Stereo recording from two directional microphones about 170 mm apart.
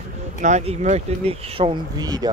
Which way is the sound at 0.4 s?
45° right (ahead or behind).